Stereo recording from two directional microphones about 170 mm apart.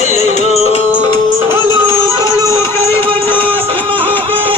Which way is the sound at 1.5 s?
15° right (ahead or behind).